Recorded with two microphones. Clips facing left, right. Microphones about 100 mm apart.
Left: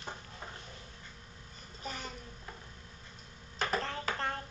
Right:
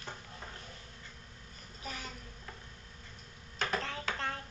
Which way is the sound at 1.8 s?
Centre (ahead or behind).